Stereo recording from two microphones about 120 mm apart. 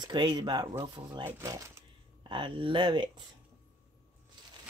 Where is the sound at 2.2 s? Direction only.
45° right (ahead or behind).